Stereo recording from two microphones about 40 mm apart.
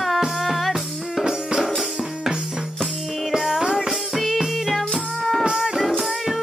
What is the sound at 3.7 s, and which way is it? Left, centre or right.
Music, centre.